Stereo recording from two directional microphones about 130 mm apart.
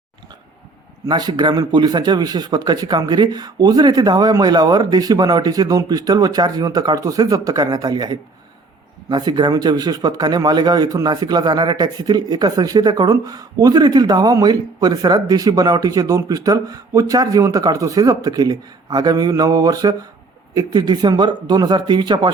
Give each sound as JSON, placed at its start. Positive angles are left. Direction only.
{"t": 1.0, "sound": "a man's voice", "side_deg": -30}